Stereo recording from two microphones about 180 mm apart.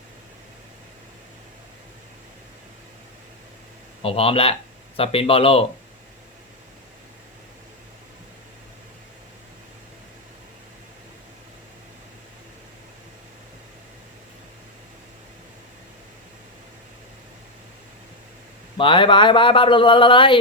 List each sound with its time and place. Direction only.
4.0 s speech: 30° left (ahead or behind)
18.8 s speech: 25° left (ahead or behind)